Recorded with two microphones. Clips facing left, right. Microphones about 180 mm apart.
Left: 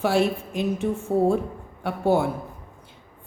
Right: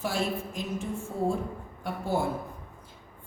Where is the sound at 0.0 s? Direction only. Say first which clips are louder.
Left 8 dB; 65° left (ahead or behind).